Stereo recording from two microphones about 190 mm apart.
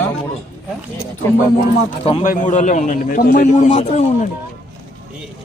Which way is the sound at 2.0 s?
30° left (ahead or behind).